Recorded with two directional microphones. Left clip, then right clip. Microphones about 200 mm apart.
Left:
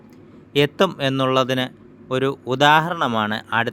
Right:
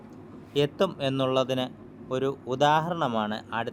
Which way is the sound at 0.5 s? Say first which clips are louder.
Left 7 dB; 40° left (ahead or behind).